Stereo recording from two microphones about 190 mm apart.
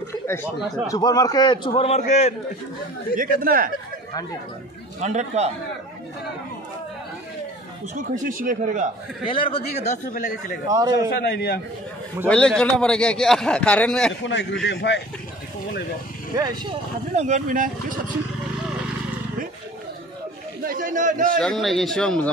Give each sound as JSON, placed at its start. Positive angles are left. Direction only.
{"t": 0.8, "sound": "a man's voice", "side_deg": 20}
{"t": 3.2, "sound": "speech", "side_deg": -50}
{"t": 5.0, "sound": "speech", "side_deg": -35}
{"t": 7.9, "sound": "speech", "side_deg": -45}
{"t": 9.3, "sound": "a man's voice", "side_deg": 30}
{"t": 10.7, "sound": "a man's voice", "side_deg": -20}
{"t": 11.1, "sound": "a man's voice", "side_deg": 55}
{"t": 12.3, "sound": "a man's voice", "side_deg": 5}
{"t": 14.2, "sound": "a man's voice", "side_deg": 70}
{"t": 17.1, "sound": "speech", "side_deg": -40}
{"t": 20.6, "sound": "chatter", "side_deg": -45}
{"t": 21.4, "sound": "a man's voice", "side_deg": 0}